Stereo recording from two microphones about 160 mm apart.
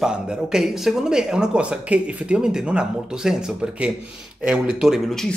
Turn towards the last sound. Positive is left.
turn(degrees=-5)  # may be behind; listen again after turning